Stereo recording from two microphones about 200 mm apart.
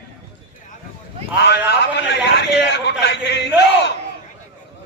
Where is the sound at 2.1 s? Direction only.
60° left (ahead or behind).